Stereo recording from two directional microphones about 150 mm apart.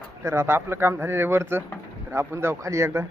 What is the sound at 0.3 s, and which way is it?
A man's voice, 15° right (ahead or behind).